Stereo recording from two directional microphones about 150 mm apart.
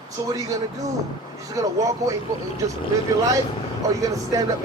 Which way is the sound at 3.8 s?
20° right (ahead or behind).